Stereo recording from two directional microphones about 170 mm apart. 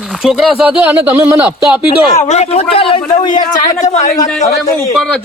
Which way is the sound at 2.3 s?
40° left (ahead or behind).